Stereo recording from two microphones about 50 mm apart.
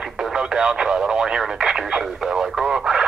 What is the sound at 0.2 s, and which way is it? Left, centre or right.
Radio, centre.